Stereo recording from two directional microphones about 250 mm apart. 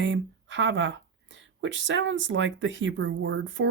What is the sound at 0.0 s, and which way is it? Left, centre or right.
Speech, right.